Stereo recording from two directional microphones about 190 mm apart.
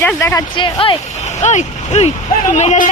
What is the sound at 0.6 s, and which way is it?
Speech, 25° left (ahead or behind).